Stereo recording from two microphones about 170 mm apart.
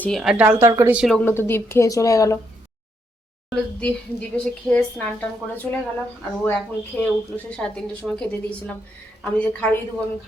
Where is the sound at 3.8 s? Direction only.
10° left (ahead or behind).